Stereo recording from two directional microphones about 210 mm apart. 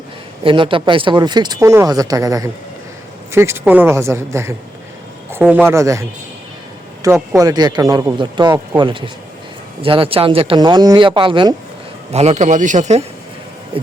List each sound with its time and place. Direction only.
0.4 s a man's voice: 25° right (ahead or behind)